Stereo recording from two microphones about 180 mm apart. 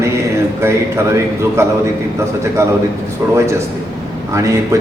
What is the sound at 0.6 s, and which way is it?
Speech, 15° right (ahead or behind).